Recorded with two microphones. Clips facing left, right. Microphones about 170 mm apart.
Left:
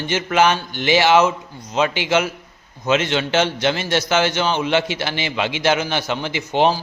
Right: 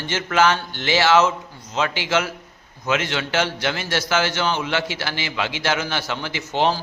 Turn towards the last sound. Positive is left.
turn(degrees=15)  # may be behind; listen again after turning